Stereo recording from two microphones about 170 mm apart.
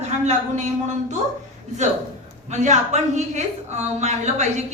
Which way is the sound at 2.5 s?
45° right (ahead or behind).